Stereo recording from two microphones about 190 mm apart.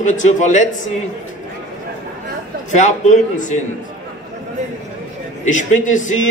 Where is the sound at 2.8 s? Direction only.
40° left (ahead or behind).